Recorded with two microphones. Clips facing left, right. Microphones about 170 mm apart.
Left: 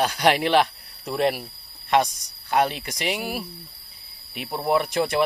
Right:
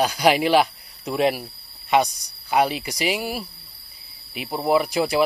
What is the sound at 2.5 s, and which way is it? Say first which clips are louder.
Speech: right 2 dB; 5° right (ahead or behind).